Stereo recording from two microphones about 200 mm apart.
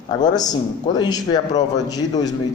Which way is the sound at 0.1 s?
20° left (ahead or behind).